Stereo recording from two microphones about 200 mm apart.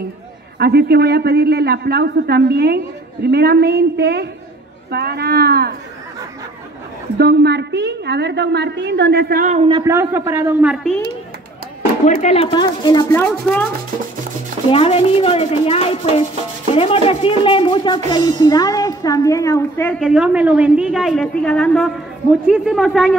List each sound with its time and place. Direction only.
0.6 s a man's voice: 55° right (ahead or behind)
7.2 s a woman's voice: 55° right (ahead or behind); by 9.7 s 40° right (ahead or behind)
9.7 s a man's voice: 20° right (ahead or behind)
12.2 s speech: 35° left (ahead or behind)
12.4 s speech: 20° left (ahead or behind)
14.7 s speech: 30° left (ahead or behind); by 20.0 s 10° left (ahead or behind)
20.0 s a woman's voice: 5° right (ahead or behind)